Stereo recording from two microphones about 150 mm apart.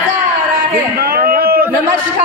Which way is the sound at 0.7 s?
85° right.